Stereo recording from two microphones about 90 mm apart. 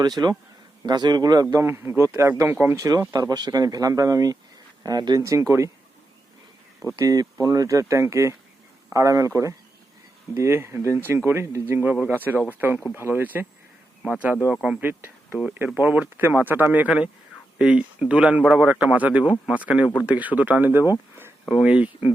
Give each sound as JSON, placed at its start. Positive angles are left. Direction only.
{"t": 0.2, "sound": "speech", "side_deg": -35}
{"t": 0.9, "sound": "speech", "side_deg": -50}
{"t": 1.6, "sound": "speech", "side_deg": -25}
{"t": 2.7, "sound": "speech", "side_deg": -35}
{"t": 5.2, "sound": "speech", "side_deg": -35}
{"t": 6.9, "sound": "speech", "side_deg": -45}
{"t": 14.8, "sound": "speech", "side_deg": -25}